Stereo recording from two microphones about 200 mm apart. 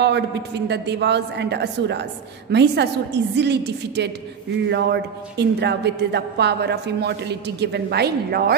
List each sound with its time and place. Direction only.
0.0 s a woman's voice: 60° right (ahead or behind)